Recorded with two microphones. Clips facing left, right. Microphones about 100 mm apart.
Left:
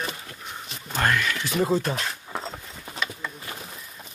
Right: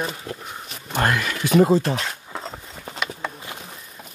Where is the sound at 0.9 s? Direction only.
20° right (ahead or behind).